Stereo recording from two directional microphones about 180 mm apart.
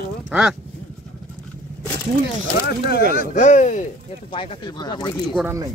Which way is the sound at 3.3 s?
40° left (ahead or behind).